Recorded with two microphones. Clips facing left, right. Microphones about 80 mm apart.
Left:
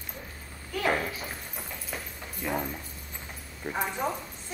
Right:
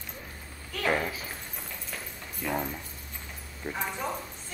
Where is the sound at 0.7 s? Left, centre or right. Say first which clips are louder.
Left 1 dB; centre.